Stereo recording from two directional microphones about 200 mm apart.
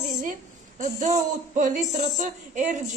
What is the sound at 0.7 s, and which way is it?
Speech, 35° right (ahead or behind).